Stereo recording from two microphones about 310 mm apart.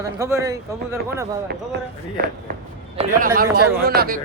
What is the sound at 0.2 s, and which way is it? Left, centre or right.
Speech, centre.